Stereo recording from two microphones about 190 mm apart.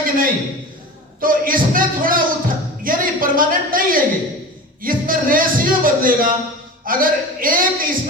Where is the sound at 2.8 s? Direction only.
45° right (ahead or behind).